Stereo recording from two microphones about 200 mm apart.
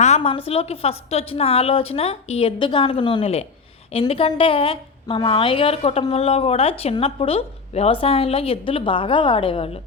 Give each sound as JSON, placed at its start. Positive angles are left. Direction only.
{"t": 0.0, "sound": "a woman's voice", "side_deg": 30}